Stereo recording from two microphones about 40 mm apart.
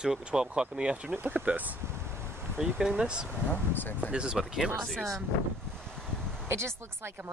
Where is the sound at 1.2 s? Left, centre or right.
Right.